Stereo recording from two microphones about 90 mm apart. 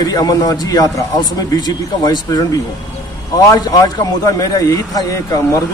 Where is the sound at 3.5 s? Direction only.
45° left (ahead or behind).